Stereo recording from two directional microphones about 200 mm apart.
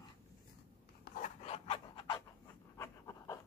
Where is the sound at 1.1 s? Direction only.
50° left (ahead or behind).